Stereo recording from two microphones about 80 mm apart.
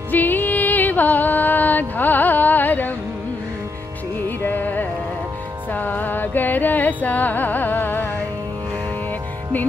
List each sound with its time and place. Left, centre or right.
0.1 s music: left
4.4 s music: left